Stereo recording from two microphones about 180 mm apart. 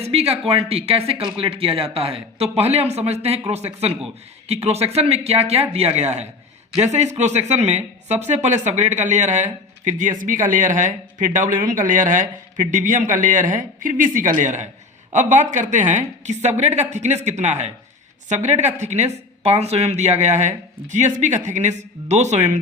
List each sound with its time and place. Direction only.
0.0 s speech: 35° right (ahead or behind)